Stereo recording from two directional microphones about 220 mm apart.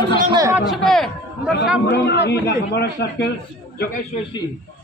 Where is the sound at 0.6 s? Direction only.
Centre (ahead or behind).